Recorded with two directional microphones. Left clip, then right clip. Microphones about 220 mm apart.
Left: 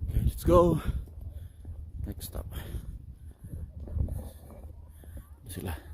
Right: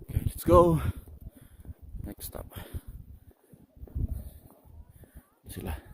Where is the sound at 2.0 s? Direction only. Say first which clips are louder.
Right 1 dB; 30° right (ahead or behind).